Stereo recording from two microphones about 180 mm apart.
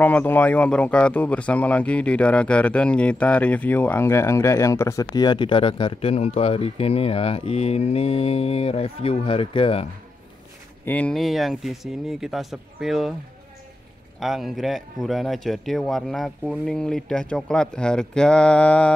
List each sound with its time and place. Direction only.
0.0 s speech: 10° left (ahead or behind); by 9.8 s 30° left (ahead or behind)
10.9 s speech: 5° left (ahead or behind)
14.2 s speech: centre (ahead or behind)